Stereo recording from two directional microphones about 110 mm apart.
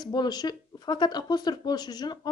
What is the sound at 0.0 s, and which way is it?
Speech, 40° left (ahead or behind).